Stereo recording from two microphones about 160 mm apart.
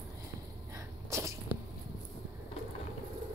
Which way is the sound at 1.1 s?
20° right (ahead or behind).